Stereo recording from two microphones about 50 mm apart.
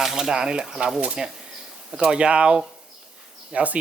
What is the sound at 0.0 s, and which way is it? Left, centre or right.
Speech, centre.